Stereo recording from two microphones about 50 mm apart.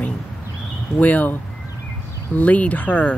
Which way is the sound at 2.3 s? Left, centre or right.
Left.